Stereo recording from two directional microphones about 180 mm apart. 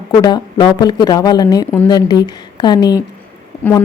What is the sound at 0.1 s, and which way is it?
Speech, 25° left (ahead or behind).